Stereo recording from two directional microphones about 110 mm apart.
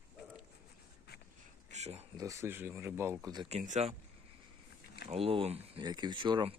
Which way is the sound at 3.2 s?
40° right (ahead or behind).